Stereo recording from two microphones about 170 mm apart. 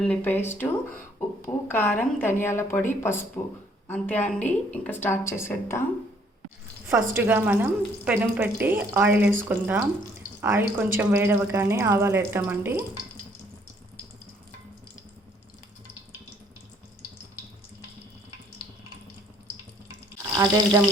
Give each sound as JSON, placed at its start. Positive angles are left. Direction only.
{"t": 0.0, "sound": "speech", "side_deg": 10}
{"t": 6.8, "sound": "speech", "side_deg": -10}
{"t": 20.3, "sound": "speech", "side_deg": -20}